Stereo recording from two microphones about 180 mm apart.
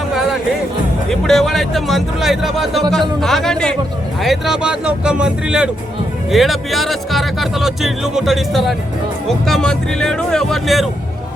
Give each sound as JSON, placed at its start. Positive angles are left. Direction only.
{"t": 0.1, "sound": "music", "side_deg": 0}
{"t": 1.1, "sound": "speech", "side_deg": 0}